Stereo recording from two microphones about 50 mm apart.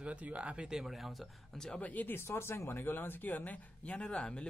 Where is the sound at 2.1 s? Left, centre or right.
Left.